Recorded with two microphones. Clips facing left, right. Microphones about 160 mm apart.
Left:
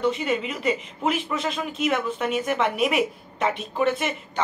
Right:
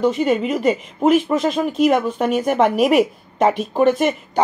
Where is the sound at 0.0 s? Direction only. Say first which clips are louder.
Right 7 dB; 45° right (ahead or behind).